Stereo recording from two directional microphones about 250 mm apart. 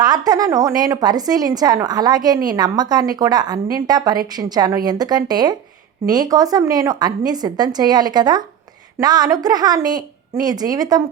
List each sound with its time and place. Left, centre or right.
0.0 s speech: centre